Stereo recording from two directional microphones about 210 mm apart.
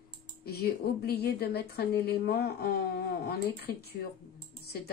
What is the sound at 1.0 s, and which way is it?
Speech, 50° left (ahead or behind).